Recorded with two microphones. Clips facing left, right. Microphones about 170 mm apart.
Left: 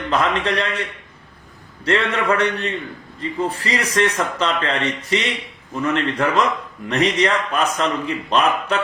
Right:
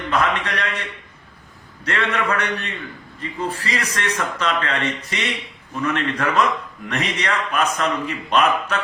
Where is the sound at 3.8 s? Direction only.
30° left (ahead or behind).